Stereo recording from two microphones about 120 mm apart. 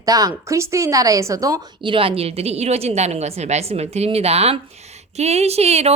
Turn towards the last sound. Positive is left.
turn(degrees=-60)  # may be behind; listen again after turning